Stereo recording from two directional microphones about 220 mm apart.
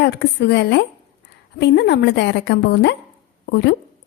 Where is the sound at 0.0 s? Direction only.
50° left (ahead or behind).